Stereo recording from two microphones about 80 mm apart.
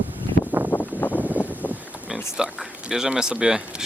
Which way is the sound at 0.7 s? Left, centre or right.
Left.